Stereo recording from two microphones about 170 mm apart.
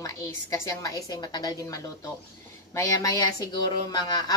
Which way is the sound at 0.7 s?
20° left (ahead or behind).